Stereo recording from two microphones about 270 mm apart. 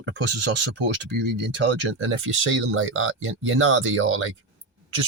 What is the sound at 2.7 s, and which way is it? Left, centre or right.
A man's voice, right.